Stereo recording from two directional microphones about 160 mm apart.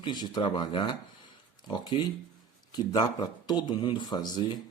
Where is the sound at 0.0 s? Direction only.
25° left (ahead or behind).